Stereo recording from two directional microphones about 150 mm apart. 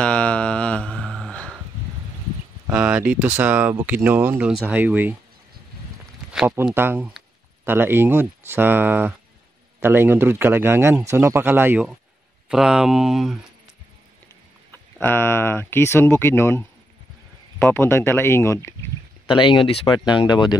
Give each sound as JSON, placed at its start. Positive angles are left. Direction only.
{"t": 0.0, "sound": "a sound", "side_deg": 5}
{"t": 2.6, "sound": "speech", "side_deg": -10}
{"t": 6.3, "sound": "speech", "side_deg": -10}
{"t": 15.0, "sound": "speech", "side_deg": 15}
{"t": 17.6, "sound": "speech", "side_deg": 15}
{"t": 19.2, "sound": "speech", "side_deg": 35}